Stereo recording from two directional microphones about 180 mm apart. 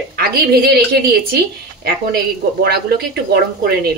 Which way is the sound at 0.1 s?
60° right (ahead or behind).